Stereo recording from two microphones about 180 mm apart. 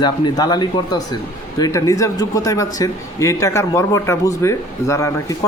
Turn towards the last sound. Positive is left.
turn(degrees=15)  # may be behind; listen again after turning